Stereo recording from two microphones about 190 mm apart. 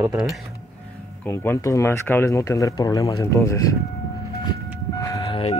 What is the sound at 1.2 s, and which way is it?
Speech, 15° left (ahead or behind).